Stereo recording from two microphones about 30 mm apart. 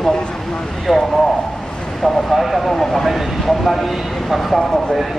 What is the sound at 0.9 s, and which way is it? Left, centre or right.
Speech, centre.